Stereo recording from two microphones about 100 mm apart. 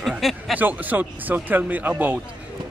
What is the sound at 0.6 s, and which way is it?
A man's voice, 15° right (ahead or behind).